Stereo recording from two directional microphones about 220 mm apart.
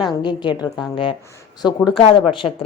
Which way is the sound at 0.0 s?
20° left (ahead or behind).